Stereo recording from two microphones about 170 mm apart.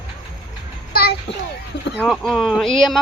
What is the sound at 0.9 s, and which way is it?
Children playing, 70° left (ahead or behind).